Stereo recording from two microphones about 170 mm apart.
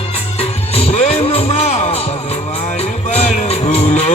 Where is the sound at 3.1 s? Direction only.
35° left (ahead or behind).